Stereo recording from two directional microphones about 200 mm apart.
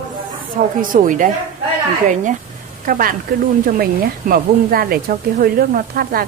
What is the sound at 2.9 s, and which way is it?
A woman's voice, 45° right (ahead or behind).